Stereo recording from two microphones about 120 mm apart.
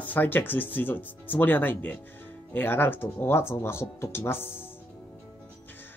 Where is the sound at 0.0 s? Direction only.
15° left (ahead or behind).